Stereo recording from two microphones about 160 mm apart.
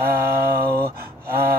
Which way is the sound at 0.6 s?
75° right (ahead or behind).